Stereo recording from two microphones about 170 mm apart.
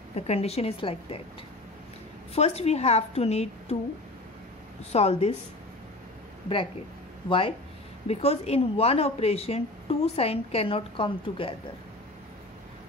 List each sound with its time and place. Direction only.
0.1 s speech: 40° left (ahead or behind)
2.3 s speech: 40° left (ahead or behind)
4.9 s speech: 40° left (ahead or behind)
7.2 s speech: 30° left (ahead or behind)